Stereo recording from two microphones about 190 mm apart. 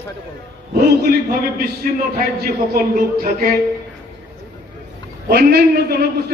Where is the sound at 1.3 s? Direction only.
55° right (ahead or behind).